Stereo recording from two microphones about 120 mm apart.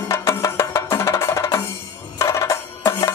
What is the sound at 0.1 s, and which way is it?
Music, 25° left (ahead or behind).